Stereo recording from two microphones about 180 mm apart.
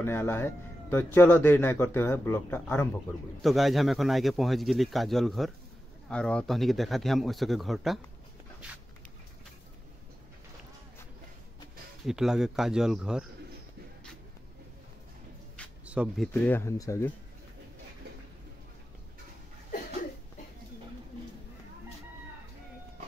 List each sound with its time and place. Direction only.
0.0 s a man's voice: 10° left (ahead or behind)
3.4 s speech: centre (ahead or behind)
12.0 s speech: centre (ahead or behind)
15.8 s a sound: 5° right (ahead or behind)
16.4 s a man's voice: 15° left (ahead or behind)